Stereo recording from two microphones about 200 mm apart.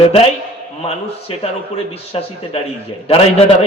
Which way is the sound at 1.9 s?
30° left (ahead or behind).